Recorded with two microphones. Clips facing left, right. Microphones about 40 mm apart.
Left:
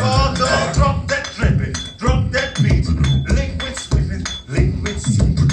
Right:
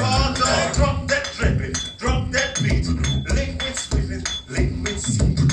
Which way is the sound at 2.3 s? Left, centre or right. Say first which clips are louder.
Left 3 dB; centre.